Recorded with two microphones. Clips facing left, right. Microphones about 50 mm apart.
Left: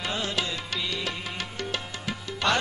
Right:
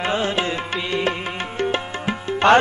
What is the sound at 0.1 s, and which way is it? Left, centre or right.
Music, right.